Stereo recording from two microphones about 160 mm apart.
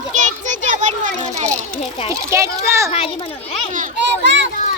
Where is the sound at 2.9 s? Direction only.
35° left (ahead or behind).